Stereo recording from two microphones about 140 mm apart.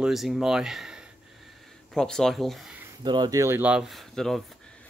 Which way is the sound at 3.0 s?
30° right (ahead or behind).